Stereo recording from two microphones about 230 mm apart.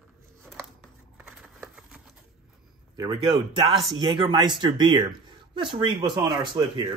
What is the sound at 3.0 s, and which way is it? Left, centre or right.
Speech, centre.